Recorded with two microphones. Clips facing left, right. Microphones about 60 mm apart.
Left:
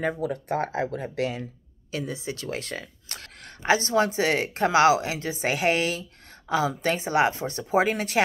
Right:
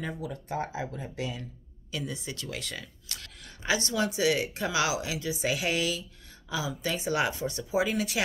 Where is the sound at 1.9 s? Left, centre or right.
Left.